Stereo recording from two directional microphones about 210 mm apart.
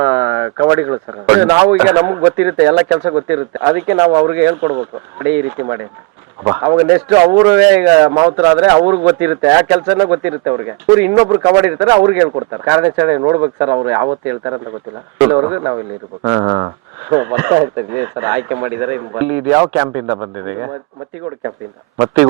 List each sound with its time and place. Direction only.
0.0 s speech: 15° right (ahead or behind)
21.9 s speech: 15° right (ahead or behind)